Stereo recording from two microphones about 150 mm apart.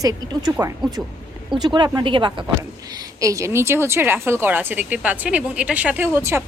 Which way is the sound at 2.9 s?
20° right (ahead or behind).